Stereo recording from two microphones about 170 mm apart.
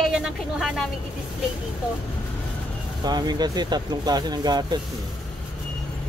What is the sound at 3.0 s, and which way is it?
Speech, 25° right (ahead or behind).